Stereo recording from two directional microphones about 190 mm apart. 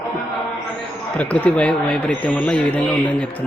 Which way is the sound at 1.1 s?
5° left (ahead or behind).